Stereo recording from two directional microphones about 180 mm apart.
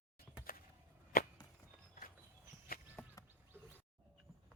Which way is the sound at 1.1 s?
55° left (ahead or behind).